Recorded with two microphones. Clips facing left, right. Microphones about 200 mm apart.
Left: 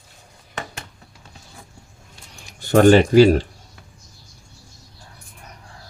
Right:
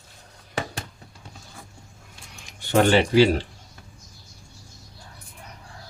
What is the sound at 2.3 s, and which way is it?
Speech, 40° left (ahead or behind).